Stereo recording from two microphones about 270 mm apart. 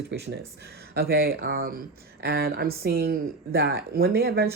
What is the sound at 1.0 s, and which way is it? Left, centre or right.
Speech, right.